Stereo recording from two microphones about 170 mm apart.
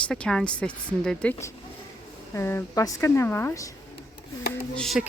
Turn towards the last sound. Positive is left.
turn(degrees=5)  # may be behind; listen again after turning